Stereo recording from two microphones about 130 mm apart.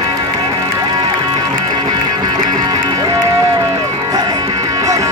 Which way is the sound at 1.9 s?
30° right (ahead or behind).